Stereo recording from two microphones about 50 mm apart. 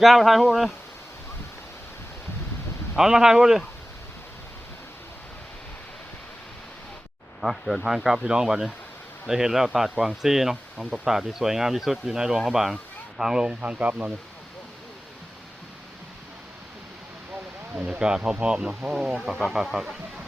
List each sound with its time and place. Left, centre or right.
0.0 s speech: centre
2.9 s speech: centre
7.4 s speech: centre
7.9 s speech: centre
13.6 s speech: right
17.7 s speech: right